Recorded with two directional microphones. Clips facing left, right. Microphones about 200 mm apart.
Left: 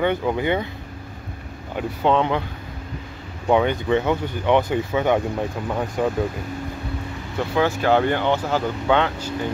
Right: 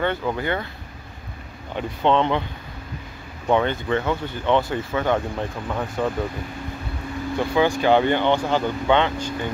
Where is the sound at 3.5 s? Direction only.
15° left (ahead or behind).